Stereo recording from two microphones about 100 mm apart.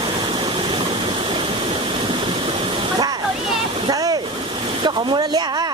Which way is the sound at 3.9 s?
40° right (ahead or behind).